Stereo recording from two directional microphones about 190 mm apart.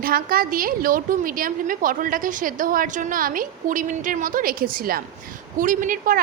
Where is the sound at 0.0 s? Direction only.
50° right (ahead or behind).